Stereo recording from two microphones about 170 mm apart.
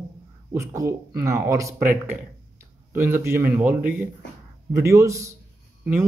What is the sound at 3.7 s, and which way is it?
Speech, 55° right (ahead or behind).